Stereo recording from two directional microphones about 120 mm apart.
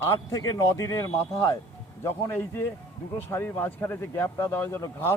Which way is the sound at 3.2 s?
20° left (ahead or behind).